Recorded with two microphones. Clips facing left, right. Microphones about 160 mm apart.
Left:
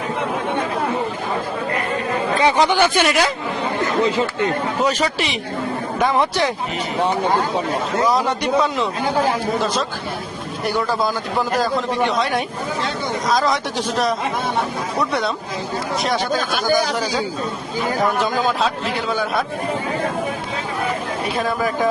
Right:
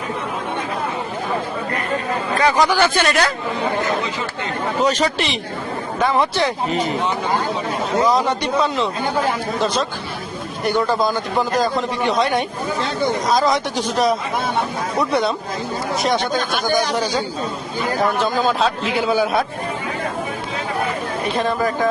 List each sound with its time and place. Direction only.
2.3 s speech: 20° left (ahead or behind)
2.7 s speech: 10° left (ahead or behind)
4.8 s speech: 5° left (ahead or behind)
6.0 s speech: 15° left (ahead or behind)
8.0 s a man's voice: 5° left (ahead or behind)
10.7 s a man's voice: 5° left (ahead or behind)
21.3 s speech: 10° left (ahead or behind)